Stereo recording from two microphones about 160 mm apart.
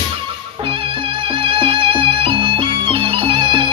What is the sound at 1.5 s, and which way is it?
Music, 35° right (ahead or behind).